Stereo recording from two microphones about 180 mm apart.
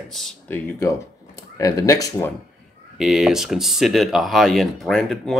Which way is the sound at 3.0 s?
Centre (ahead or behind).